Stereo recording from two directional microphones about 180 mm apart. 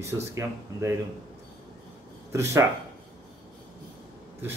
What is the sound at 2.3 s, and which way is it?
Speech, 15° right (ahead or behind).